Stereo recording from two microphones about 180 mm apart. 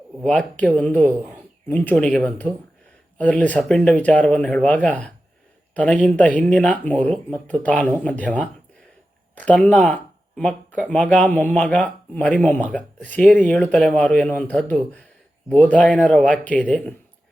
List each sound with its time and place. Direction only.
0.2 s speech: 5° left (ahead or behind)